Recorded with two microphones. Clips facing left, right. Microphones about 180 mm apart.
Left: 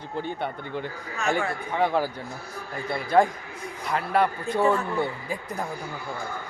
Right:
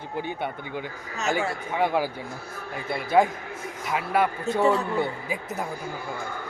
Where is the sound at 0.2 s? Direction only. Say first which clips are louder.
Even; 10° right (ahead or behind).